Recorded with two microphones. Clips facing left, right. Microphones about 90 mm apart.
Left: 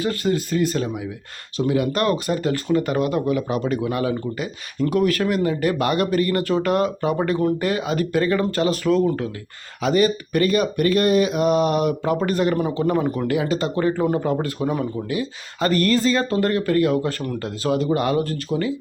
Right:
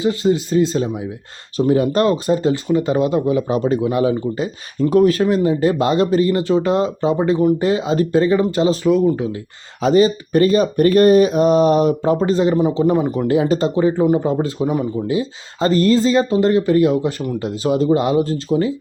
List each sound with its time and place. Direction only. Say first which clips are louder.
0.0 s speech: right 5 dB; 20° right (ahead or behind)
1.5 s speech: right 5 dB; 35° right (ahead or behind)
4.8 s speech: right 6 dB; 40° right (ahead or behind)
8.9 s speech: right 3 dB; 10° right (ahead or behind)
9.8 s speech: right 5 dB; 30° right (ahead or behind)
13.7 s speech: right 4 dB; 20° right (ahead or behind)